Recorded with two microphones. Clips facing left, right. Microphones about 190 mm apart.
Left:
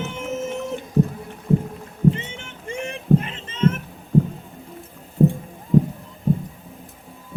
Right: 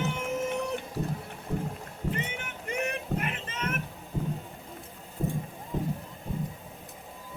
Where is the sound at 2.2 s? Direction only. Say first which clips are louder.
Even; 25° left (ahead or behind).